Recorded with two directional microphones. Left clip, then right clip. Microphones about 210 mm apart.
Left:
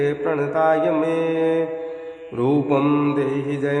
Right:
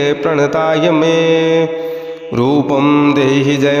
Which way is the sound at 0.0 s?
40° right (ahead or behind).